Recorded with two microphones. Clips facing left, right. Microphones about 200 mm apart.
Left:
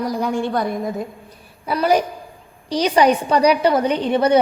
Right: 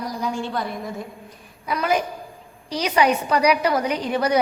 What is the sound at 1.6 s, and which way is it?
A woman's voice, 35° left (ahead or behind).